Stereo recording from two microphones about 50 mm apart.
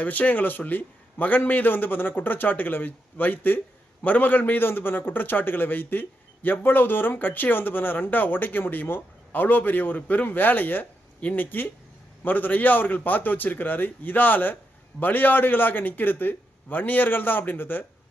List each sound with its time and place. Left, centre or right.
0.0 s a man's voice: left